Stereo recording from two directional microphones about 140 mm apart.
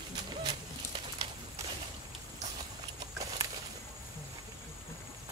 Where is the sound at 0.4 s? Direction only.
35° right (ahead or behind).